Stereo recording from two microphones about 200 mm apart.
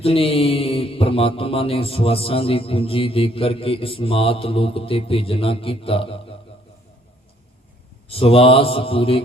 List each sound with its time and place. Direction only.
0.0 s mantra: 30° left (ahead or behind)
8.1 s mantra: 30° left (ahead or behind)